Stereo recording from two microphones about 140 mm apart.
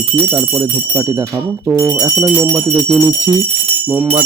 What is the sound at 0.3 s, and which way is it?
Speech, 15° right (ahead or behind).